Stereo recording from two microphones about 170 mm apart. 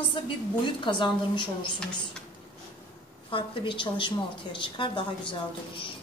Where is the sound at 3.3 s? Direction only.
30° left (ahead or behind).